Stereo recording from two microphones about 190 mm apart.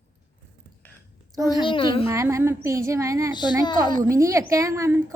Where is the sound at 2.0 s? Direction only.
15° right (ahead or behind).